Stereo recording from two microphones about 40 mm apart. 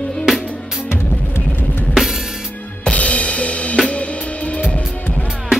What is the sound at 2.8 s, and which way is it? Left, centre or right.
Drum kit, left.